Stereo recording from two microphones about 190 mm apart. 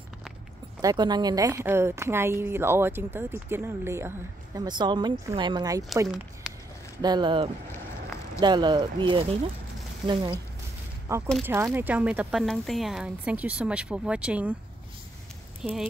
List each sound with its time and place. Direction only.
0.7 s a woman's voice: 20° right (ahead or behind)
6.0 s speech: centre (ahead or behind)
7.0 s a woman's voice: 20° right (ahead or behind); by 14.5 s 5° right (ahead or behind)
15.6 s speech: 5° right (ahead or behind)